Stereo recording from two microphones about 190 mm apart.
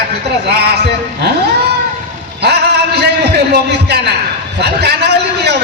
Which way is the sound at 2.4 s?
60° right (ahead or behind).